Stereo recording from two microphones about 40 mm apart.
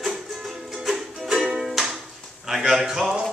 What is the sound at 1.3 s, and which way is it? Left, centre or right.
Music, right.